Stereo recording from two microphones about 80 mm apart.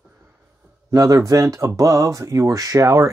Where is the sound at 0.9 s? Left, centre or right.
Right.